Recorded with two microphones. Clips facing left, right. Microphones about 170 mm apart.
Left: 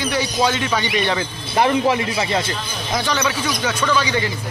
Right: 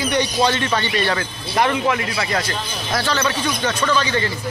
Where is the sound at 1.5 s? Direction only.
30° left (ahead or behind); by 4.3 s 15° left (ahead or behind).